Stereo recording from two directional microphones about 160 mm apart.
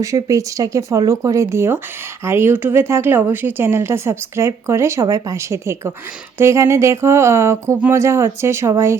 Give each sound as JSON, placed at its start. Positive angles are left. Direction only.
{"t": 0.0, "sound": "speech", "side_deg": -20}